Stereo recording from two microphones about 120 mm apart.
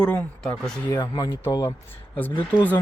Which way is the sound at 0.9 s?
30° left (ahead or behind).